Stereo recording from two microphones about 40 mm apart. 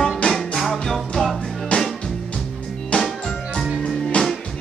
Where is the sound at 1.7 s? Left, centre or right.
Left.